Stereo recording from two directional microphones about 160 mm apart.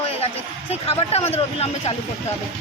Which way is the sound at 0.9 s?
40° left (ahead or behind).